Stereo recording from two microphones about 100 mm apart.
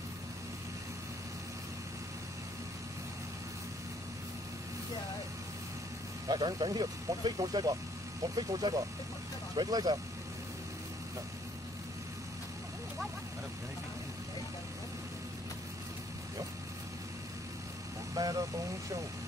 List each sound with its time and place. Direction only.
6.2 s speech: 40° right (ahead or behind)
18.1 s speech: 35° right (ahead or behind)